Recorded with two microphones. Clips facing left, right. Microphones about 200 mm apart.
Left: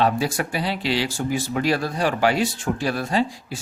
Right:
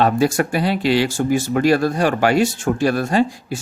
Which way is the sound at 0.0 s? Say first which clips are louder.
Right 5 dB; 45° right (ahead or behind).